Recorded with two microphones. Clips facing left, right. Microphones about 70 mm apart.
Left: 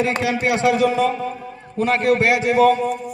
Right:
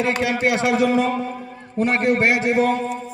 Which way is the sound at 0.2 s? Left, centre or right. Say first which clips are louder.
Left 1 dB; right.